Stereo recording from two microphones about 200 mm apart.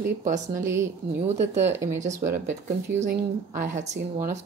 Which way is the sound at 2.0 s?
40° right (ahead or behind).